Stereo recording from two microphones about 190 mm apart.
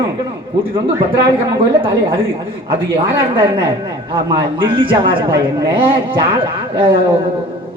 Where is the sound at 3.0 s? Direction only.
25° right (ahead or behind).